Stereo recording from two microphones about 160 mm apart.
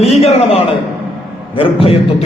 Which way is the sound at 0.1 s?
40° left (ahead or behind).